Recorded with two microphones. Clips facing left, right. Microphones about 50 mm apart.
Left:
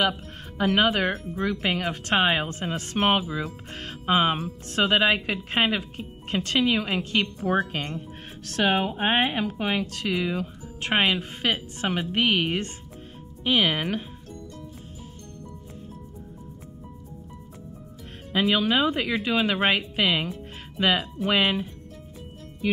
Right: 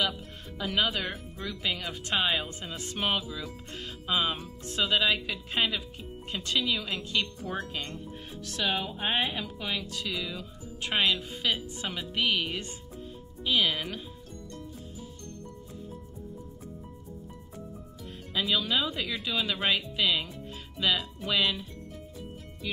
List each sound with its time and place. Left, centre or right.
0.6 s speech: left
18.3 s speech: left